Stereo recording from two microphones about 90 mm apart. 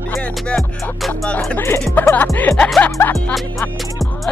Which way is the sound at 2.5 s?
10° left (ahead or behind).